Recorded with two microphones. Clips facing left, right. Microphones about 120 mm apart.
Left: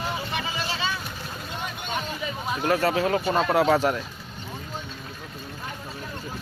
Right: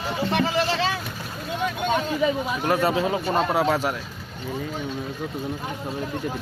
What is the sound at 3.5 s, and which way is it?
Speech, 5° right (ahead or behind).